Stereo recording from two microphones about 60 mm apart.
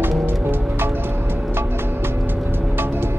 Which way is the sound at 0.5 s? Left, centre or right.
Right.